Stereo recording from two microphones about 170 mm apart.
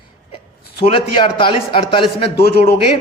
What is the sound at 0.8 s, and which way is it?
A man's voice, 30° left (ahead or behind).